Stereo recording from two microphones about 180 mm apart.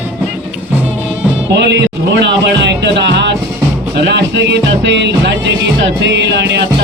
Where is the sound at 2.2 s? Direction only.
75° right (ahead or behind).